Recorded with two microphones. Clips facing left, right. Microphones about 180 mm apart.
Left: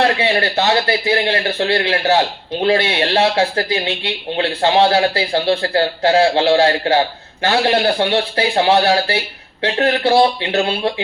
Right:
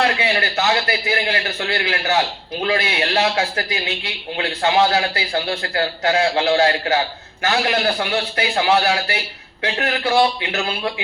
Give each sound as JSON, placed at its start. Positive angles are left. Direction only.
{"t": 0.0, "sound": "a man's voice", "side_deg": 30}